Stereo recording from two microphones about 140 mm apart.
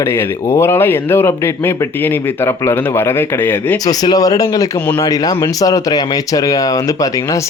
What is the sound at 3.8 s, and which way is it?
Speech, 30° left (ahead or behind).